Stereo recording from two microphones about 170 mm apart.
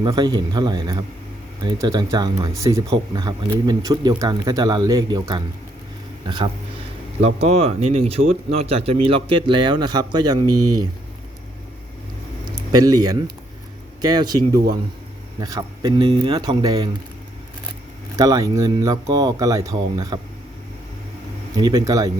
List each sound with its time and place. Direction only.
0.0 s speech: 25° right (ahead or behind)
12.5 s speech: 20° right (ahead or behind)
18.2 s speech: 20° right (ahead or behind)
21.5 s speech: 20° right (ahead or behind)